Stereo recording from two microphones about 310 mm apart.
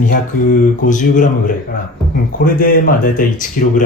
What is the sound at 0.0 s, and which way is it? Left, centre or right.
Speech, left.